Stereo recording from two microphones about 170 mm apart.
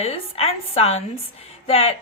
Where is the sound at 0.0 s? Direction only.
35° left (ahead or behind).